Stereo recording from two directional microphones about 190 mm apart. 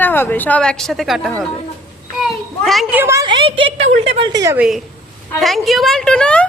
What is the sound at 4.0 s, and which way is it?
Speech, 30° right (ahead or behind).